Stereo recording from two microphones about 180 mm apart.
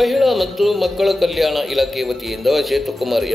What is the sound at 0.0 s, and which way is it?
A man's voice, centre (ahead or behind).